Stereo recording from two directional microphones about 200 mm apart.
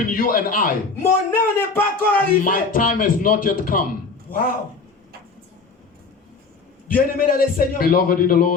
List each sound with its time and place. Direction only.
0.1 s a man's voice: 45° left (ahead or behind)
1.3 s a sound: 10° left (ahead or behind)
2.4 s a man's voice: 45° left (ahead or behind)
6.8 s a man's voice: 45° left (ahead or behind)